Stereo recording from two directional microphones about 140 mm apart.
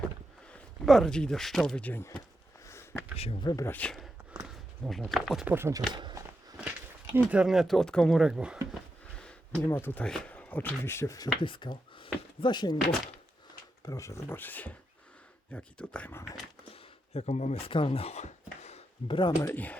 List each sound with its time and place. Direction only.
0.9 s speech: centre (ahead or behind)
3.4 s speech: 25° left (ahead or behind)
3.7 s speech: 10° left (ahead or behind)
5.5 s speech: 15° right (ahead or behind)
5.9 s speech: 30° right (ahead or behind)
7.1 s speech: 10° right (ahead or behind)
9.2 s speech: 15° left (ahead or behind)
11.3 s speech: 35° left (ahead or behind)
13.8 s speech: 25° left (ahead or behind)
16.7 s a sound: 50° left (ahead or behind)
17.7 s a sound: 40° left (ahead or behind); by 18.8 s 55° left (ahead or behind)
19.0 s speech: 35° left (ahead or behind)
19.4 s speech: 15° left (ahead or behind)